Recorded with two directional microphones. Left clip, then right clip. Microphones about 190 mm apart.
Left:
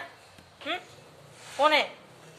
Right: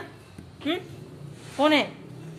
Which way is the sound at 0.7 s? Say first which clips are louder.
Right 4 dB; 25° right (ahead or behind).